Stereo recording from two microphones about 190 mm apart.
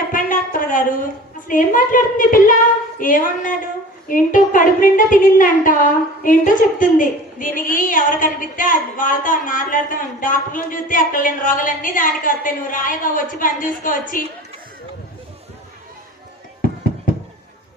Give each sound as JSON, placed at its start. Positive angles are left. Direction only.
{"t": 0.1, "sound": "a woman's voice", "side_deg": 45}